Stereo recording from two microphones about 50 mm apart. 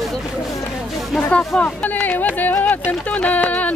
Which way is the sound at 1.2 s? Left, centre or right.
Left.